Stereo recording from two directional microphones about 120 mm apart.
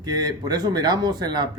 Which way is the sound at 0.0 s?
35° right (ahead or behind).